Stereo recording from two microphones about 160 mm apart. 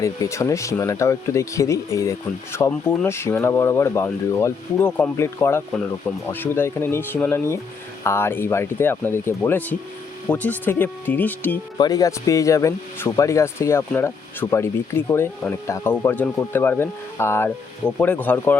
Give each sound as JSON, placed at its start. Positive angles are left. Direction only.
{"t": 0.0, "sound": "speech", "side_deg": 20}
{"t": 11.8, "sound": "speech", "side_deg": 25}